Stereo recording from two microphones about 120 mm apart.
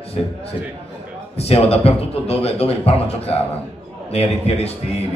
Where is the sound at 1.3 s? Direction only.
55° left (ahead or behind).